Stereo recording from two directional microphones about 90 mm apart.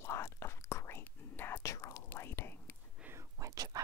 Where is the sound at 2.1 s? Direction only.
25° left (ahead or behind).